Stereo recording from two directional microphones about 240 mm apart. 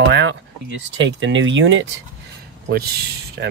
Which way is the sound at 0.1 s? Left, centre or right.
Right.